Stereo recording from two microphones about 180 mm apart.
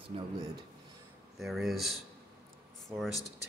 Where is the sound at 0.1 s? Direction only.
35° right (ahead or behind).